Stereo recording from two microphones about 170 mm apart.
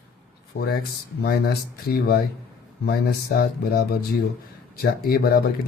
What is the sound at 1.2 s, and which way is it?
Speech, 65° left (ahead or behind).